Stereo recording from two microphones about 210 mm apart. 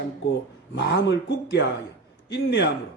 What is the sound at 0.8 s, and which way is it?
Speech, 55° left (ahead or behind).